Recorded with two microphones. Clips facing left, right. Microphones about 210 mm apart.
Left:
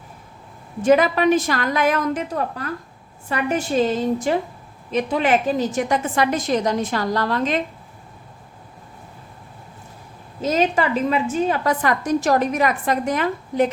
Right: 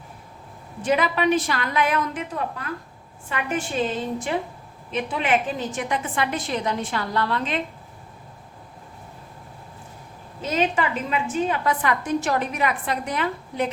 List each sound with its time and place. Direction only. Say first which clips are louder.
0.8 s a woman's voice: left 6 dB; 45° left (ahead or behind)
10.4 s a woman's voice: left 4 dB; 40° left (ahead or behind)